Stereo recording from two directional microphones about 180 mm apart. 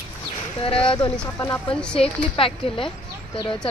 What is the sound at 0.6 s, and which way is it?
Speech, 30° left (ahead or behind).